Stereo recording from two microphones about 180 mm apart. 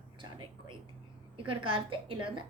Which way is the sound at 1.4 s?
30° right (ahead or behind).